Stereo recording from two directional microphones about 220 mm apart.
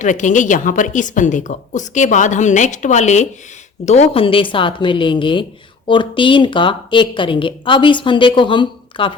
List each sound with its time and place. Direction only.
0.0 s a woman's voice: 35° left (ahead or behind)